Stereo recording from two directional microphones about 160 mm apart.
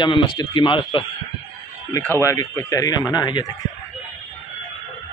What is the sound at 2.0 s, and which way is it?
Speech, 15° left (ahead or behind).